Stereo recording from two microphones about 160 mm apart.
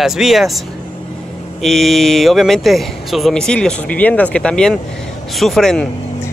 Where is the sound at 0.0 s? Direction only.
Centre (ahead or behind).